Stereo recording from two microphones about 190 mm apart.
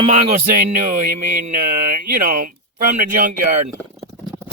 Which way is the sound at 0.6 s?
45° right (ahead or behind).